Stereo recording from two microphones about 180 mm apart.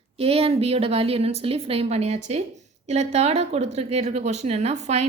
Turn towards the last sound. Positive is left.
turn(degrees=-40)  # may be behind; listen again after turning